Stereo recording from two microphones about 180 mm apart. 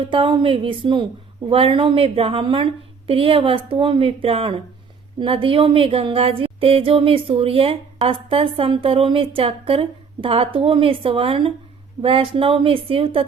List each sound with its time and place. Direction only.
0.0 s a woman's voice: 30° right (ahead or behind)